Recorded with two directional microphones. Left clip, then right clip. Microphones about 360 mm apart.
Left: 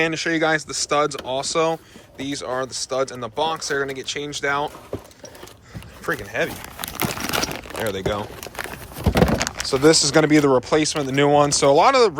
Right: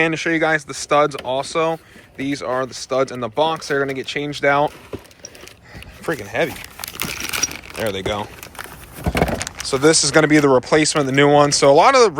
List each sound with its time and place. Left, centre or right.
0.0 s speech: centre
6.1 s speech: centre
7.0 s coin: centre
7.8 s speech: centre
9.6 s speech: centre